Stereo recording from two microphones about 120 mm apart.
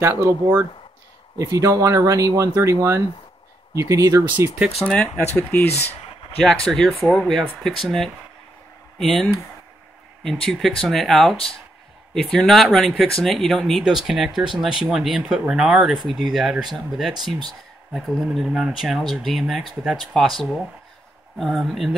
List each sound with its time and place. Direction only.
0.0 s speech: 25° right (ahead or behind)
1.4 s speech: 25° right (ahead or behind)
4.8 s speech: 10° left (ahead or behind)